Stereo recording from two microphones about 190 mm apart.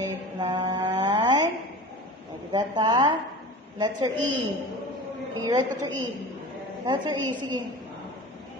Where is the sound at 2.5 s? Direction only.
20° right (ahead or behind).